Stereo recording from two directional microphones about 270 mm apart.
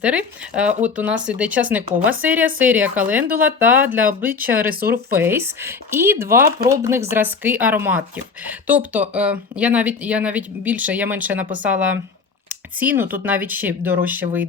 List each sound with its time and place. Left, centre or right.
0.0 s speech: centre
4.6 s speech: right
5.1 s speech: centre